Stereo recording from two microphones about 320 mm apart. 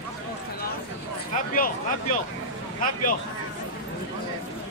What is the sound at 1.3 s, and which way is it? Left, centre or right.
Speech, left.